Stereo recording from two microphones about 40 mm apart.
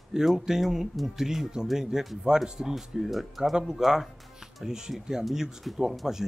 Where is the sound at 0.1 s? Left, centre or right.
Centre.